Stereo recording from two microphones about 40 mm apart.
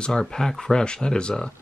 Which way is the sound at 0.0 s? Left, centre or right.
Centre.